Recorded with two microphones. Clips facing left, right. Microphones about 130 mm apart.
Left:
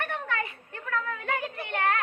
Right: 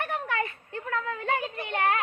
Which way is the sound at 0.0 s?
25° right (ahead or behind).